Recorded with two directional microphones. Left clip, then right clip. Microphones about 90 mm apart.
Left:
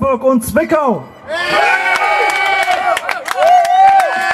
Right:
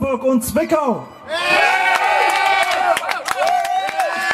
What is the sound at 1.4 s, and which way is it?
Crowd, 15° right (ahead or behind).